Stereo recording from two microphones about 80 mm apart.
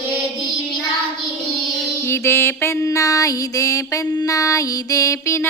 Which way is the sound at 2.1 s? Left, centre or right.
Left.